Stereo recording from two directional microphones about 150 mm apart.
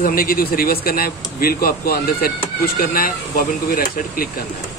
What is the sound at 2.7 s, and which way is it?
Speech, 75° left (ahead or behind).